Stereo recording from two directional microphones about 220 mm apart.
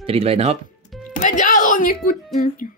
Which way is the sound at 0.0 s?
25° right (ahead or behind).